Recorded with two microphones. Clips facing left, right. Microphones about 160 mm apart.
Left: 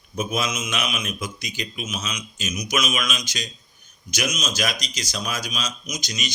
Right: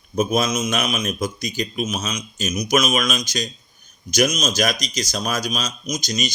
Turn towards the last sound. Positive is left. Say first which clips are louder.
# right 7 dB
turn(degrees=-40)  # may be behind; listen again after turning